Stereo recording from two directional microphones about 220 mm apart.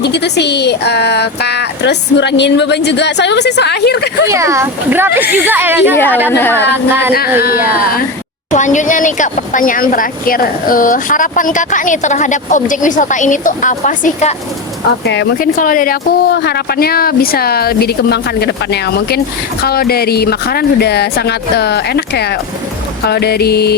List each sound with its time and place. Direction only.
0.0 s speech: 50° left (ahead or behind)
4.3 s speech: 15° right (ahead or behind)
6.3 s a woman's voice: 10° left (ahead or behind)
7.5 s speech: 10° right (ahead or behind)
8.4 s a woman's voice: 35° left (ahead or behind)
15.0 s speech: 50° left (ahead or behind)